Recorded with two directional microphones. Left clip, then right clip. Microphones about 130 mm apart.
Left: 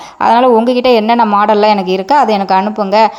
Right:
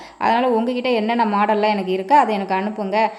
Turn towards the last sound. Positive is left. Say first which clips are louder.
# left 10 dB
turn(degrees=35)  # may be behind; listen again after turning